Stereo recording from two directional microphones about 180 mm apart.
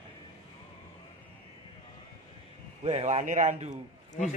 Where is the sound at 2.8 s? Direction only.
35° right (ahead or behind).